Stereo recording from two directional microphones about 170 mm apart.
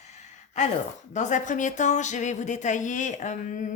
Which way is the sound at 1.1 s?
45° left (ahead or behind).